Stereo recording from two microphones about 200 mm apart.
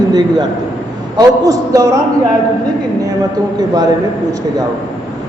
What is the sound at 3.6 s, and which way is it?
Speech, 20° right (ahead or behind).